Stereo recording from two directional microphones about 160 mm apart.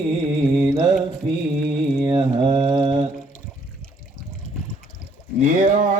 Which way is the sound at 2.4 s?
40° right (ahead or behind).